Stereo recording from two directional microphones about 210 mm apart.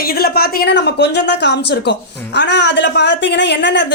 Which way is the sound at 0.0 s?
45° left (ahead or behind).